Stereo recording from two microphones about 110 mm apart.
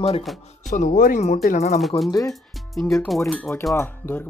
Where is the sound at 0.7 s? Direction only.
85° left.